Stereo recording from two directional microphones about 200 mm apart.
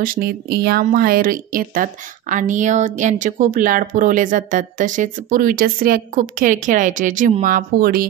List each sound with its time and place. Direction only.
0.0 s speech: 45° right (ahead or behind)